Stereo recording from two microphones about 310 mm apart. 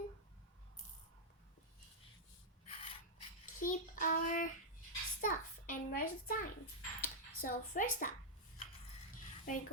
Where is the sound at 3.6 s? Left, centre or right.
Left.